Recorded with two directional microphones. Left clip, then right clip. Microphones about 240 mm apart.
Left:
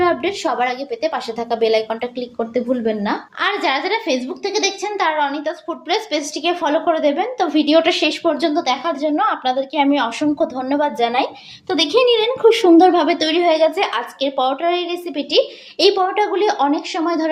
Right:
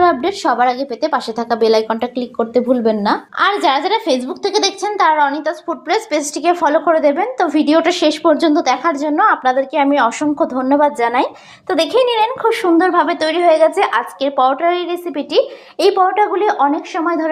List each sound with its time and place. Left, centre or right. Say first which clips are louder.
0.0 s a woman's voice: right 4 dB; right; by 17.2 s centre